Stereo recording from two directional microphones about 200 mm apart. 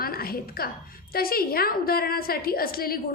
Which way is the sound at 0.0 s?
50° left (ahead or behind).